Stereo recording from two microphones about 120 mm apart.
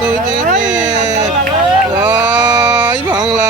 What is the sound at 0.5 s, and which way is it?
Speech, 90° right.